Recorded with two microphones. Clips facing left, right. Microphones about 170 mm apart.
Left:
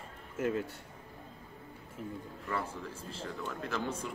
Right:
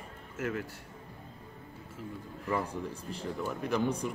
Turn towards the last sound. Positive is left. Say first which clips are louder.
# right 6 dB
turn(degrees=-15)  # may be behind; listen again after turning